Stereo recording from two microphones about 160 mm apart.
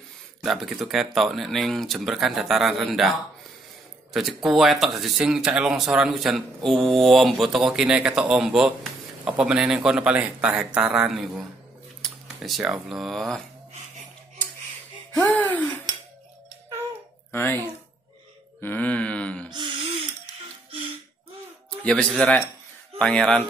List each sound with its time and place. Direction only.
0.4 s speech: centre (ahead or behind)
4.1 s speech: centre (ahead or behind)
15.1 s groan: 10° left (ahead or behind)
17.3 s speech: 10° left (ahead or behind)
18.6 s groan: 10° left (ahead or behind)
19.5 s gasp: 30° right (ahead or behind)
21.8 s speech: 5° left (ahead or behind)
22.9 s groan: 5° left (ahead or behind)